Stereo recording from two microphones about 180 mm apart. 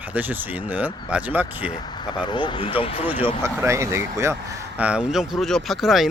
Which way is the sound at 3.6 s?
15° right (ahead or behind).